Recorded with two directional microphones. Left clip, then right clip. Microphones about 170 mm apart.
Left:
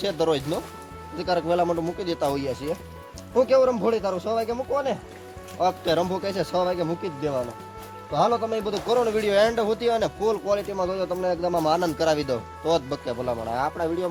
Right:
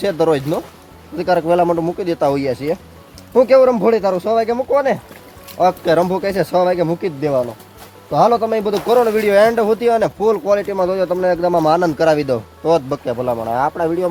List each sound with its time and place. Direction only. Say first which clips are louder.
0.0 s speech: right 8 dB; 10° right (ahead or behind)